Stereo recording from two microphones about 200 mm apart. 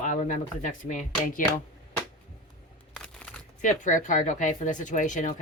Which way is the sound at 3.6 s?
40° left (ahead or behind).